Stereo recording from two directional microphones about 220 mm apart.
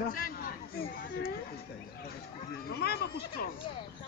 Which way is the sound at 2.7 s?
45° left (ahead or behind).